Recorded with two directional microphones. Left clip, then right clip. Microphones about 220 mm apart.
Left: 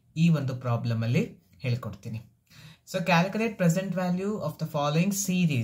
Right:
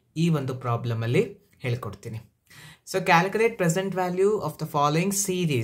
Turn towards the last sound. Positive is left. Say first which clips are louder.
# right 4 dB
turn(degrees=-30)  # may be behind; listen again after turning